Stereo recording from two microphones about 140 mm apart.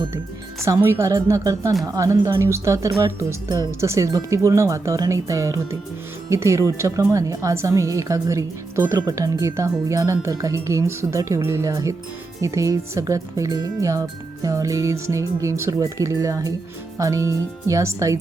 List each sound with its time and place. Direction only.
0.6 s a woman's voice: 20° right (ahead or behind)